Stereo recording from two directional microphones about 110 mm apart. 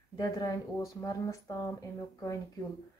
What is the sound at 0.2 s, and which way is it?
Speech, 35° left (ahead or behind).